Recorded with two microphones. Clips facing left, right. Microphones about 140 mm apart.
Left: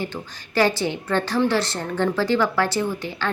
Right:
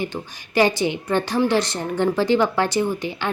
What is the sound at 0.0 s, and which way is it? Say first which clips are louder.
A woman's voice: right 2 dB; 15° right (ahead or behind).